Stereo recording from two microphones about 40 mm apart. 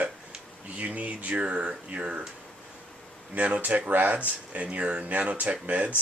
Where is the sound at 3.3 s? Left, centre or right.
Right.